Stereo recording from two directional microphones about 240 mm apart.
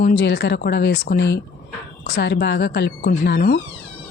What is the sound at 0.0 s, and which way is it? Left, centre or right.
Speech, left.